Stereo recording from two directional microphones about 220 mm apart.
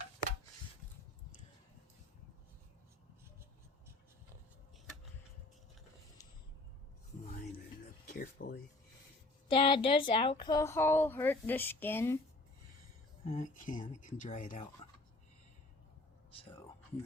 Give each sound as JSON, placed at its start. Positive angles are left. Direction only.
{"t": 8.0, "sound": "a sound", "side_deg": 45}
{"t": 9.5, "sound": "speech", "side_deg": 25}
{"t": 13.2, "sound": "speech", "side_deg": 30}
{"t": 14.8, "sound": "fowl", "side_deg": 25}